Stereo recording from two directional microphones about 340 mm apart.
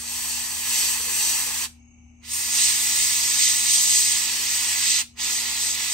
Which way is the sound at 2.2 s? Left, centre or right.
Centre.